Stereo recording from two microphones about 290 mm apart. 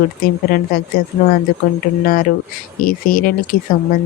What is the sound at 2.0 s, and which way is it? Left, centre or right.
Speech, left.